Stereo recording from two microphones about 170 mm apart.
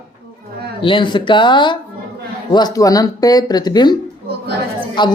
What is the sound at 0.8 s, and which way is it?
Speech, 30° left (ahead or behind).